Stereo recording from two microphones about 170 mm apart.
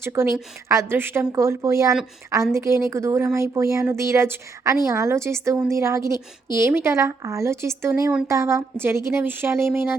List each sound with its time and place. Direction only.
0.0 s a woman's voice: 15° right (ahead or behind)